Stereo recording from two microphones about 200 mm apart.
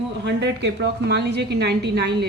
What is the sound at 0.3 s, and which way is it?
A woman's voice, 60° right (ahead or behind).